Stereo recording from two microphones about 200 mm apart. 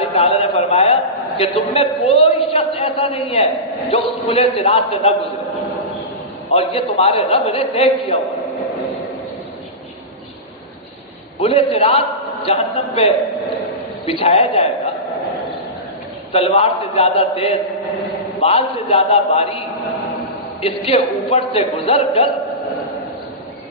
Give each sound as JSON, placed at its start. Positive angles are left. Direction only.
{"t": 0.1, "sound": "a sound", "side_deg": 30}
{"t": 1.4, "sound": "a man's voice", "side_deg": 30}
{"t": 6.5, "sound": "a man's voice", "side_deg": 30}
{"t": 11.3, "sound": "a man's voice", "side_deg": 30}
{"t": 16.3, "sound": "a man's voice", "side_deg": 30}
{"t": 20.6, "sound": "a man's voice", "side_deg": 30}